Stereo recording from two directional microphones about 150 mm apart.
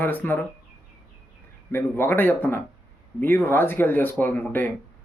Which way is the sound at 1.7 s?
15° left (ahead or behind).